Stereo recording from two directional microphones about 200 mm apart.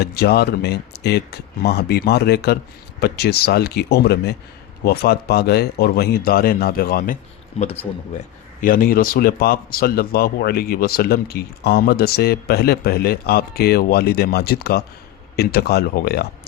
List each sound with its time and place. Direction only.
0.0 s speech: 50° left (ahead or behind)
8.6 s speech: 45° left (ahead or behind)